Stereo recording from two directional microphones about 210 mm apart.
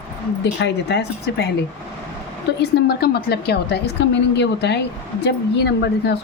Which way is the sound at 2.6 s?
50° left (ahead or behind).